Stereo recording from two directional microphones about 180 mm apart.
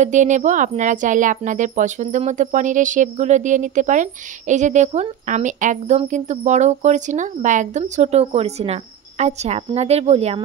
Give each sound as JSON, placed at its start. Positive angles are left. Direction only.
{"t": 0.0, "sound": "speech", "side_deg": -45}